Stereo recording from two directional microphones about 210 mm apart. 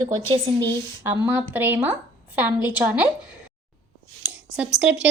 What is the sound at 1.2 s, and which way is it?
A woman's voice, 5° right (ahead or behind).